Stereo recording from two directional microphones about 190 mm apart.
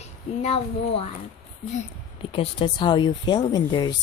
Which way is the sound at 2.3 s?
30° left (ahead or behind).